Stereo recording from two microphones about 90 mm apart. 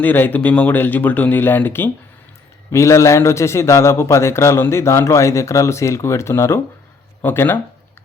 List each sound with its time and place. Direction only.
0.0 s speech: 20° left (ahead or behind)
2.7 s a man's voice: 35° left (ahead or behind)